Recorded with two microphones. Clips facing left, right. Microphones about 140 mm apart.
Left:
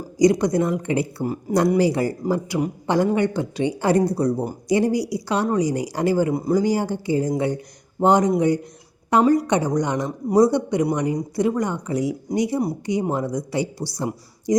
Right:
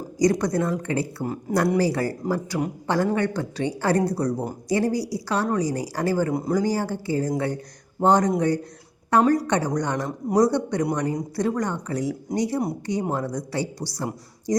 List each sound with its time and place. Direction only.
0.2 s speech: 15° left (ahead or behind)
1.2 s speech: 5° left (ahead or behind)
1.8 s speech: 15° left (ahead or behind)
6.3 s speech: 5° left (ahead or behind)
6.6 s speech: 15° left (ahead or behind)